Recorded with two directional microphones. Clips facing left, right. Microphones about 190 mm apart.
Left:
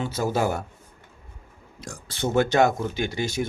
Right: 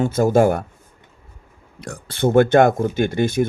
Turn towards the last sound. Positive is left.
turn(degrees=-55)  # may be behind; listen again after turning